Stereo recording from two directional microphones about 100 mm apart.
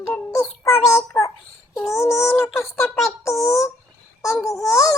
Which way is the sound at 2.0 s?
30° left (ahead or behind).